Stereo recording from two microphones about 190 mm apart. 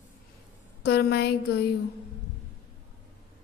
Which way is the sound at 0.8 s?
60° left (ahead or behind).